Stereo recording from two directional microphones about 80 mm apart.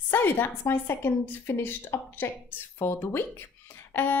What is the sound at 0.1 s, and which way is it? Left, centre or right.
A woman's voice, left.